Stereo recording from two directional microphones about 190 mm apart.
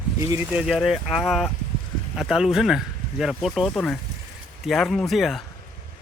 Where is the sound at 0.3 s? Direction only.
10° right (ahead or behind).